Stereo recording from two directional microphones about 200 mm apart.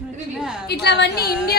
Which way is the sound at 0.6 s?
55° left (ahead or behind).